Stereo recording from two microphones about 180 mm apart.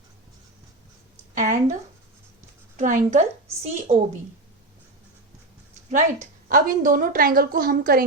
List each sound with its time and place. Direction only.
1.4 s a sound: 45° right (ahead or behind)
2.7 s a woman's voice: 45° right (ahead or behind)
6.5 s a woman's voice: 50° right (ahead or behind)